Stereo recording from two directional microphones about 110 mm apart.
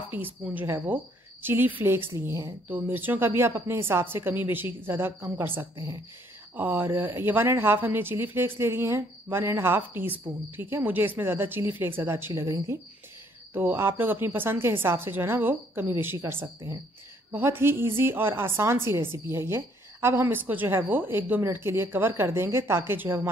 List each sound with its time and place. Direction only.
0.1 s a woman's voice: 20° right (ahead or behind)